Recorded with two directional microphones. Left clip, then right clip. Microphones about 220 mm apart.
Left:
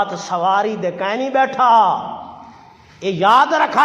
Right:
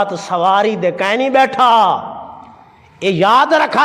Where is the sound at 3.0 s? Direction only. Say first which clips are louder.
Right 2 dB; 50° right (ahead or behind).